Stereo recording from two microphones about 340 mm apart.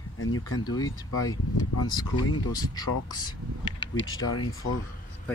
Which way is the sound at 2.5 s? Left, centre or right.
Centre.